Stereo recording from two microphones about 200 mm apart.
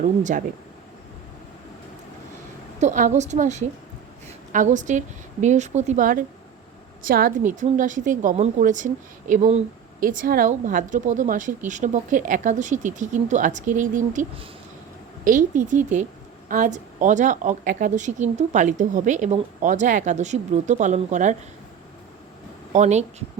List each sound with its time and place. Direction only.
0.0 s a woman's voice: 40° right (ahead or behind)
2.8 s a woman's voice: 35° right (ahead or behind)
22.7 s a woman's voice: 35° right (ahead or behind)